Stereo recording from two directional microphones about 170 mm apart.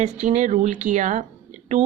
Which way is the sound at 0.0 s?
40° right (ahead or behind).